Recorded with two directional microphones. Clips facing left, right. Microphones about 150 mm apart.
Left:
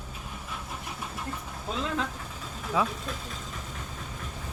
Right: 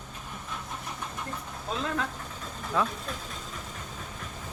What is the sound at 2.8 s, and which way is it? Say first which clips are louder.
Speech: left 1 dB; 5° left (ahead or behind).